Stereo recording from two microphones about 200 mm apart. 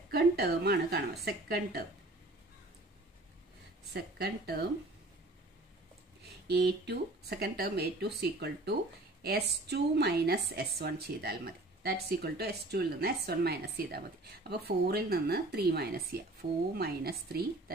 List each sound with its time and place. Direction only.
0.1 s a woman's voice: 55° right (ahead or behind)
3.9 s speech: 50° right (ahead or behind)
6.4 s speech: 55° right (ahead or behind)